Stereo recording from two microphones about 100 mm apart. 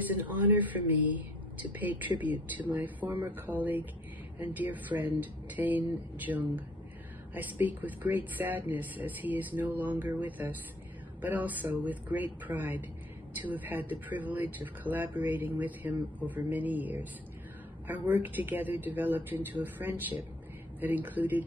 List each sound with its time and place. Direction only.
0.2 s speech: 20° right (ahead or behind)